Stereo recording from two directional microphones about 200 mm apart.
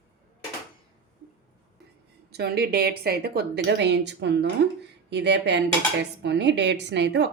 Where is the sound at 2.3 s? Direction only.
55° right (ahead or behind).